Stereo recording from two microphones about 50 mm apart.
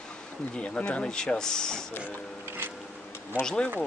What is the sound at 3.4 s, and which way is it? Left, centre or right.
Speech, centre.